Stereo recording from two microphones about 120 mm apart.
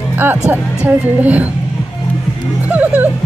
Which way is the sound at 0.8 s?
15° right (ahead or behind).